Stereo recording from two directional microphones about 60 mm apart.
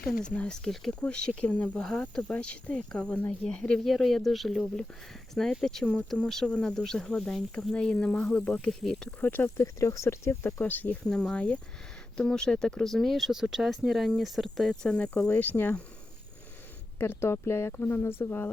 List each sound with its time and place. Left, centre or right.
0.6 s speech: centre
1.8 s speech: centre
2.2 s speech: centre
3.8 s speech: centre; by 8.5 s left
8.8 s speech: centre
9.2 s speech: left
9.7 s speech: left
10.6 s speech: left
11.0 s speech: centre
15.4 s speech: left
17.0 s speech: left